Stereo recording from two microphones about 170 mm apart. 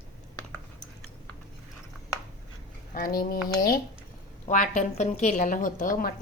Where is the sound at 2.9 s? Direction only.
55° left (ahead or behind).